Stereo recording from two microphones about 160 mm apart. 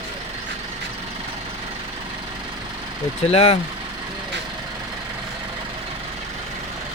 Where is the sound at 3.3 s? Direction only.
40° left (ahead or behind).